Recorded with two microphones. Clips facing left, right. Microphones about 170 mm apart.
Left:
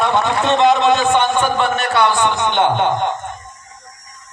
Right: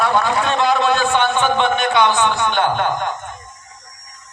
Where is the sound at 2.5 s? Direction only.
20° left (ahead or behind).